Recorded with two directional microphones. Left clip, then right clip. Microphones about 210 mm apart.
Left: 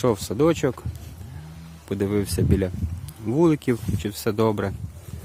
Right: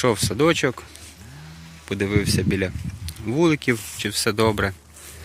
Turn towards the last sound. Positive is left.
turn(degrees=0)  # may be behind; listen again after turning